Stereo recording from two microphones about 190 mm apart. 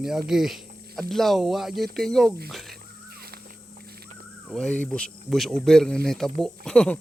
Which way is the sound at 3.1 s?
55° right (ahead or behind).